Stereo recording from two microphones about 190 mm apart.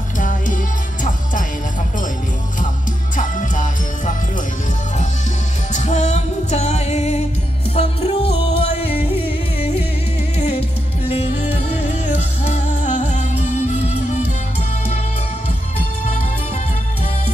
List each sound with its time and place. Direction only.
0.2 s music: 45° left (ahead or behind)
3.2 s music: 40° left (ahead or behind)
5.7 s music: 40° left (ahead or behind)
11.1 s music: 35° left (ahead or behind)